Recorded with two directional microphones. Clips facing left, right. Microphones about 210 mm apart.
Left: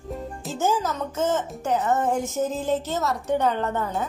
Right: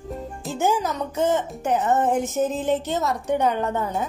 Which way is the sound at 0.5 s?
15° right (ahead or behind).